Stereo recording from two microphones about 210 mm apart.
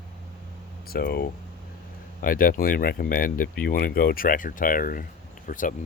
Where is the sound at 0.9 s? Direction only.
50° left (ahead or behind).